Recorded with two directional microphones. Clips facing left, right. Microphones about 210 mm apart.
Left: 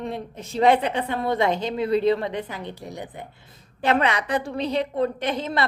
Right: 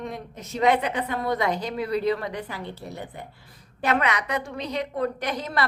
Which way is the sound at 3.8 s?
30° left (ahead or behind).